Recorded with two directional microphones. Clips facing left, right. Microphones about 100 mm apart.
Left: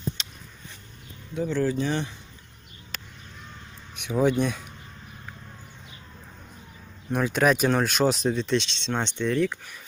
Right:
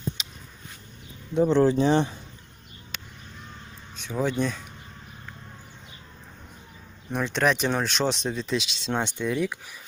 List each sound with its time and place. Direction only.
0.2 s a sound: 5° right (ahead or behind)
1.5 s speech: 25° right (ahead or behind)
2.9 s crow: centre (ahead or behind)
3.9 s speech: 15° left (ahead or behind)
7.1 s speech: 5° left (ahead or behind); by 9.6 s 10° right (ahead or behind)